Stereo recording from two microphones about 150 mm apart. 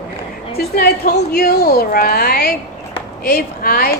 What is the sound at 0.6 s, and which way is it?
Speech, 90° left.